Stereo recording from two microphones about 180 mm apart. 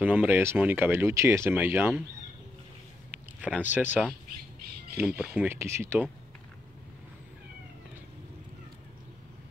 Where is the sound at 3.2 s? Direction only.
10° right (ahead or behind).